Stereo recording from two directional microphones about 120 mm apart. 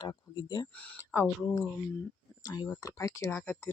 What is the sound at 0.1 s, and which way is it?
Speech, 35° left (ahead or behind).